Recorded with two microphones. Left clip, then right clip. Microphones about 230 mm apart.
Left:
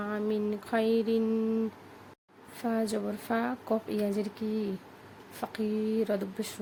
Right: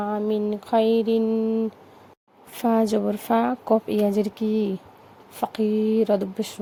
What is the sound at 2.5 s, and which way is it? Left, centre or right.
Speech, right.